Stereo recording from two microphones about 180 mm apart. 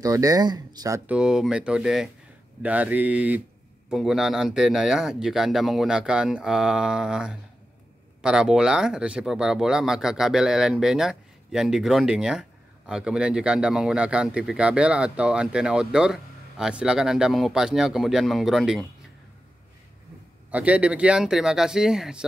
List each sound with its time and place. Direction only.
0.0 s speech: 20° right (ahead or behind)
1.1 s speech: 5° right (ahead or behind)
20.5 s speech: 5° right (ahead or behind)